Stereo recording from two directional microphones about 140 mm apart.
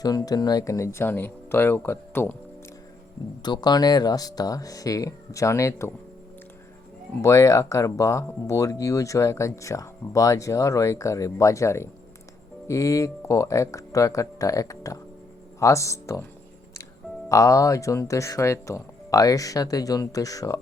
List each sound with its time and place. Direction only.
0.0 s speech: 25° left (ahead or behind)
3.4 s speech: 30° left (ahead or behind)
7.2 s speech: 20° left (ahead or behind)
17.2 s speech: 25° left (ahead or behind)